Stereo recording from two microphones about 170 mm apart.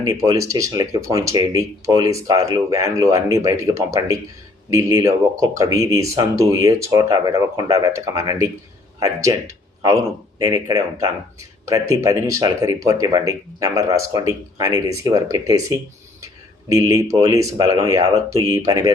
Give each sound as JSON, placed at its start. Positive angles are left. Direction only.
{"t": 0.0, "sound": "speech", "side_deg": -20}